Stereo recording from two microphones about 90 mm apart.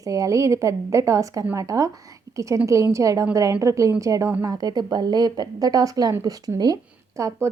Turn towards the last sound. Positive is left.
turn(degrees=-35)  # may be behind; listen again after turning